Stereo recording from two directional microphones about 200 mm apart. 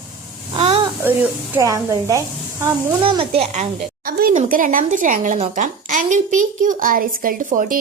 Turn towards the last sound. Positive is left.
turn(degrees=-40)  # may be behind; listen again after turning